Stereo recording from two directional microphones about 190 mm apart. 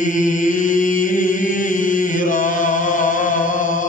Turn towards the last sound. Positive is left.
turn(degrees=45)  # may be behind; listen again after turning